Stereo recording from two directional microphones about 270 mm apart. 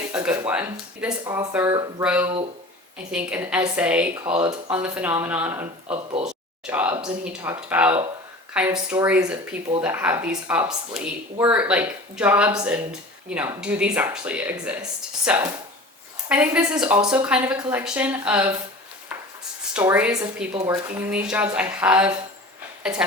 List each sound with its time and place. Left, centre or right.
0.1 s speech: centre
4.3 s speech: centre
4.7 s speech: centre
5.9 s speech: right
6.2 s speech: centre
19.7 s speech: centre